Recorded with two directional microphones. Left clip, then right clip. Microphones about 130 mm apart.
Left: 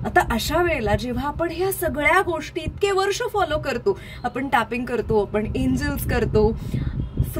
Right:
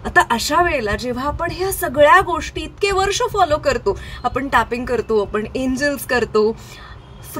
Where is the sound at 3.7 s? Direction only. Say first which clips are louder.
Right 4 dB; 35° left (ahead or behind).